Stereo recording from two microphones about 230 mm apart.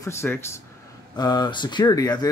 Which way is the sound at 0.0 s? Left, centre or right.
Centre.